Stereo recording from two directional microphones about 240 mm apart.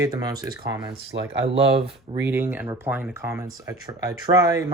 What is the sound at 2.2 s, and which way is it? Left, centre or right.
Speech, centre.